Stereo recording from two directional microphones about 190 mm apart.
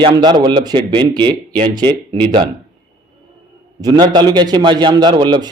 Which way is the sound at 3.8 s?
20° right (ahead or behind).